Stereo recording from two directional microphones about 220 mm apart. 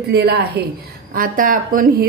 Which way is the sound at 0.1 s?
50° right (ahead or behind).